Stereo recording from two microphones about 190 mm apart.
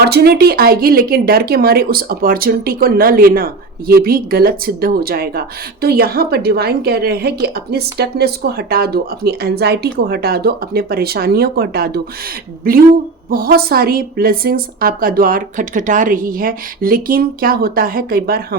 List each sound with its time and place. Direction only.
0.0 s speech: 55° right (ahead or behind)